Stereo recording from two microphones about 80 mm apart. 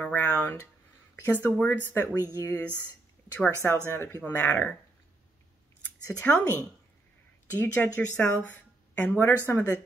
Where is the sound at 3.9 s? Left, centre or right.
Left.